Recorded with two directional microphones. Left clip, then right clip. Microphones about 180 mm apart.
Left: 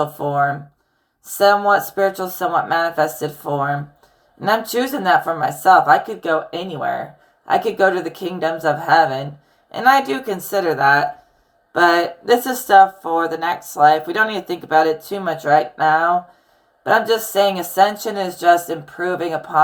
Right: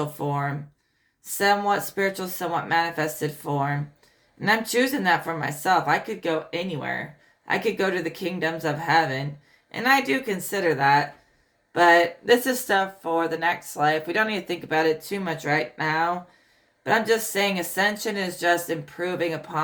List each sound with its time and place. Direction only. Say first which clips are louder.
1.4 s speech: left 8 dB; 20° right (ahead or behind)